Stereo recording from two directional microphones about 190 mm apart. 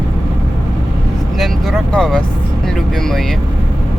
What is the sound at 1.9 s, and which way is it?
Speech, 5° left (ahead or behind).